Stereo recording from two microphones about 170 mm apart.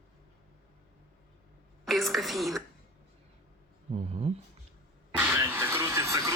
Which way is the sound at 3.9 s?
35° right (ahead or behind).